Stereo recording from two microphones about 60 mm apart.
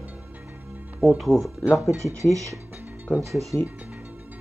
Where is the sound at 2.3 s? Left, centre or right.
Right.